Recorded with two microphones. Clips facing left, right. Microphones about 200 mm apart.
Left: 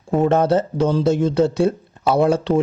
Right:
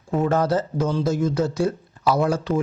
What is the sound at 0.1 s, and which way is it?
Speech, 25° left (ahead or behind).